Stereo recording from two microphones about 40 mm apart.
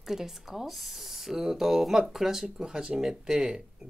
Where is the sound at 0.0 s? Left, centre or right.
Centre.